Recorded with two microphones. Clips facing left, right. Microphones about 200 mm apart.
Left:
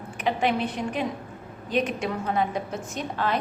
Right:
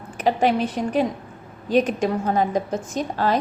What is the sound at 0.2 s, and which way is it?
A woman's voice, 40° right (ahead or behind).